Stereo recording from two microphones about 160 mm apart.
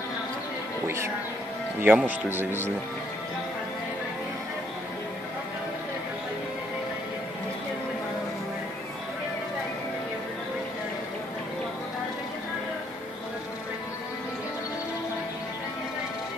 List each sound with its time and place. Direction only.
0.8 s speech: 15° right (ahead or behind)